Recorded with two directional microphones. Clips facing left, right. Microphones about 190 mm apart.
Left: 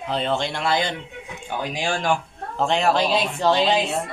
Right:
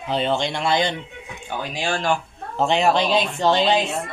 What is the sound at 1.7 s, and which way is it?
Speech, 10° left (ahead or behind).